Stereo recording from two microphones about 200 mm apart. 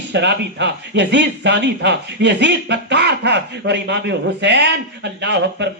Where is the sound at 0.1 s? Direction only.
60° right (ahead or behind).